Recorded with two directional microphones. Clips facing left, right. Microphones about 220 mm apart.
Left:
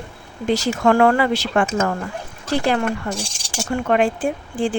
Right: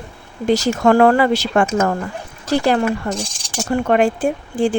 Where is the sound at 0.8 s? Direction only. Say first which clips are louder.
Right 3 dB; 35° right (ahead or behind).